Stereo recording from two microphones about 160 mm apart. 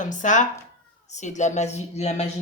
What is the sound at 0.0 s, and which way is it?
Speech, 50° left (ahead or behind).